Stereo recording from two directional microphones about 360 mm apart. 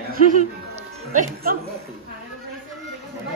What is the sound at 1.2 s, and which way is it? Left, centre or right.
Speech, right.